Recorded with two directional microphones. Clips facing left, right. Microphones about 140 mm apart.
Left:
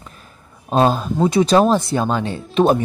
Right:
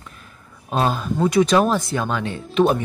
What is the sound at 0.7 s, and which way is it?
Speech, 30° left (ahead or behind).